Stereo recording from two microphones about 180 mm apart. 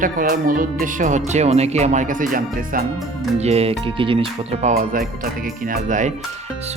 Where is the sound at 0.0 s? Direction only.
50° right (ahead or behind).